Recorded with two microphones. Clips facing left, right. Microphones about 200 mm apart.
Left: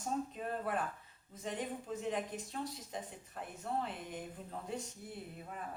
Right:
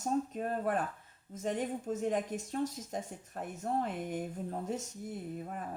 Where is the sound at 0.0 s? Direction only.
45° right (ahead or behind).